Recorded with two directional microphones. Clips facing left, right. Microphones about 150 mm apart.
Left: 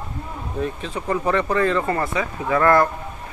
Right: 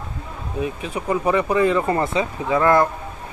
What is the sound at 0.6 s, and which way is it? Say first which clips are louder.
Speech: right 1 dB; 10° right (ahead or behind).